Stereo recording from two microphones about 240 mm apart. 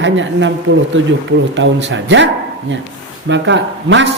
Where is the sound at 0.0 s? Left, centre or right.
Right.